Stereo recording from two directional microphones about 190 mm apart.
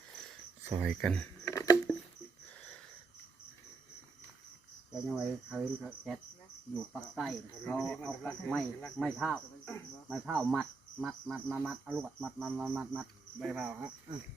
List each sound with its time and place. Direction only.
0.7 s speech: 5° right (ahead or behind)
1.5 s a sound: 15° left (ahead or behind)
4.9 s speech: 5° right (ahead or behind)